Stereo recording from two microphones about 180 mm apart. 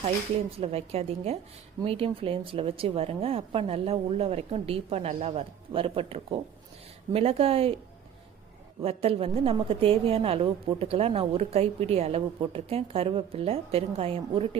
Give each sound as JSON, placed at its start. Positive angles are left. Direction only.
{"t": 0.6, "sound": "a woman's voice", "side_deg": -35}
{"t": 8.8, "sound": "a woman's voice", "side_deg": -35}